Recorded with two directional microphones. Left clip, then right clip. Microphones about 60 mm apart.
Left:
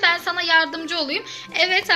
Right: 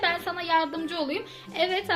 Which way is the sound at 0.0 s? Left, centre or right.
Right.